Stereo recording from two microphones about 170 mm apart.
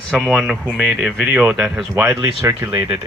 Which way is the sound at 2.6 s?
20° right (ahead or behind).